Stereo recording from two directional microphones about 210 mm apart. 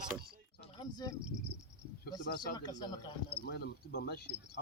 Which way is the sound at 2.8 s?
20° left (ahead or behind).